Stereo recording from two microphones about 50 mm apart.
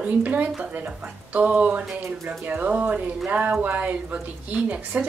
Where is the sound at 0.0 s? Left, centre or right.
Right.